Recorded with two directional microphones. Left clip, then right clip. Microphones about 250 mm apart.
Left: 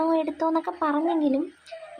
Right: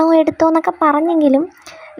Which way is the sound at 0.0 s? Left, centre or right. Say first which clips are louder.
Right 12 dB; right.